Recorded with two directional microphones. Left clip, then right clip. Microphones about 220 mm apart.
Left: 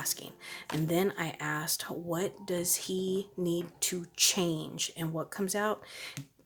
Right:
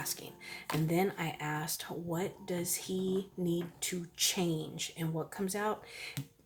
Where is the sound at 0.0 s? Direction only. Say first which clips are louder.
Left 3 dB; 35° left (ahead or behind).